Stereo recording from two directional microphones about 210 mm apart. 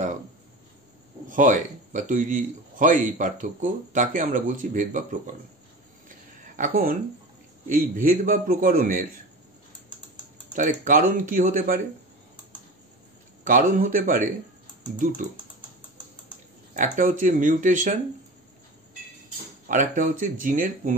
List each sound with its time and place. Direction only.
1.3 s a man's voice: 40° right (ahead or behind)
6.0 s a sound: 40° right (ahead or behind)
7.6 s a man's voice: 40° right (ahead or behind)
10.5 s a man's voice: 35° right (ahead or behind)
13.4 s a man's voice: 40° right (ahead or behind)
16.7 s a man's voice: 40° right (ahead or behind)
19.7 s a man's voice: 40° right (ahead or behind)